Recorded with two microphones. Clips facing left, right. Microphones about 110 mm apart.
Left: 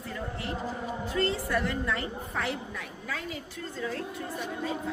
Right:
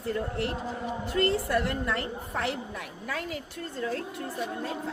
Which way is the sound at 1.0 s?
65° right (ahead or behind).